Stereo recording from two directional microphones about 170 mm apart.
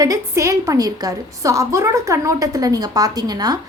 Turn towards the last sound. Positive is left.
turn(degrees=-25)  # may be behind; listen again after turning